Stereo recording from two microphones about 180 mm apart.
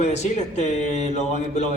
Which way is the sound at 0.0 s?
40° left (ahead or behind).